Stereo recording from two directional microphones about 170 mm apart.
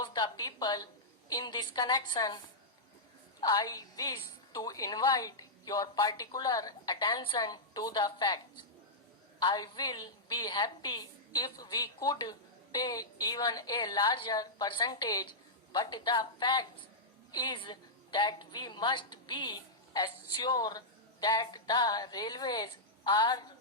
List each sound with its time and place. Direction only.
0.0 s a woman's voice: 25° left (ahead or behind)
3.4 s a woman's voice: 20° left (ahead or behind)